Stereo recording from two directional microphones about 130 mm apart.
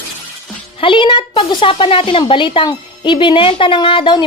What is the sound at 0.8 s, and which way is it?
Speech, 40° left (ahead or behind).